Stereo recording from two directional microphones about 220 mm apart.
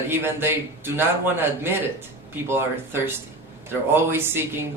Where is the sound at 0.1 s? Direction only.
10° right (ahead or behind).